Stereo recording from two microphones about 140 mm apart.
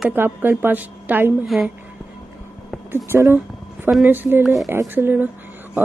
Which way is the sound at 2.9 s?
20° right (ahead or behind).